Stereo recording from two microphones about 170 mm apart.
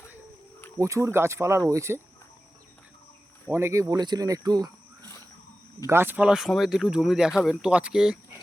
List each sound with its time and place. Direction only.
0.8 s speech: 20° right (ahead or behind)
3.5 s speech: 15° right (ahead or behind)
5.8 s speech: 15° right (ahead or behind)